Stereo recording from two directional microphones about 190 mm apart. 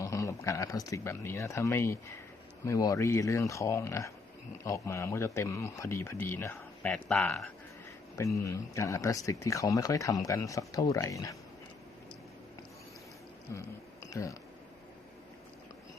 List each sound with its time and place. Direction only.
0.0 s speech: 15° left (ahead or behind)
8.4 s speech: 15° left (ahead or behind)
13.5 s a sound: 15° left (ahead or behind)